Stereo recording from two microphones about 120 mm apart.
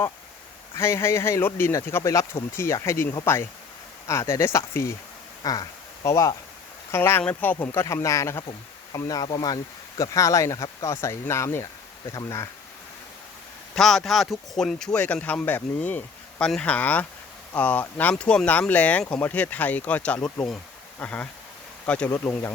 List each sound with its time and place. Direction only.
0.8 s speech: 20° left (ahead or behind)
5.4 s speech: 35° left (ahead or behind)
13.7 s speech: centre (ahead or behind)
22.1 s speech: 20° left (ahead or behind)